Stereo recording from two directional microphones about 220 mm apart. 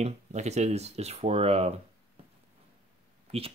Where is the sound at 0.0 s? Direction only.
30° right (ahead or behind).